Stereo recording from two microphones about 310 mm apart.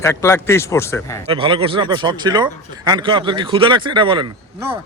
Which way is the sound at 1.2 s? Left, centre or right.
Centre.